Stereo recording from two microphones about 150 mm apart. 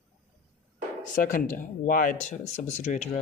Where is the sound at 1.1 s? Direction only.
65° left (ahead or behind).